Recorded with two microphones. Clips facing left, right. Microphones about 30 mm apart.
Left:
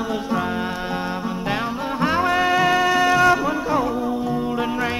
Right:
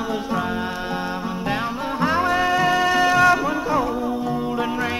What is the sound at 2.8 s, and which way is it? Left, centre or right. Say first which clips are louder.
Music: even; centre.